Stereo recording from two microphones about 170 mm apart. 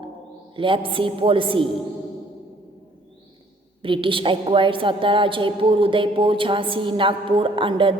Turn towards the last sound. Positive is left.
turn(degrees=-30)  # may be behind; listen again after turning